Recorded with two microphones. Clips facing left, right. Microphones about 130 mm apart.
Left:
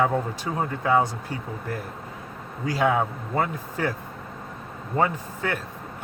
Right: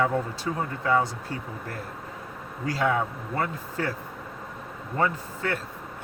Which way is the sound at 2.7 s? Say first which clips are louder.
Left 3 dB; 15° left (ahead or behind).